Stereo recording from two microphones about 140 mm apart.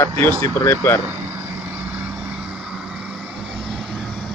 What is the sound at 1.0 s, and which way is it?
Vehicle, 15° right (ahead or behind).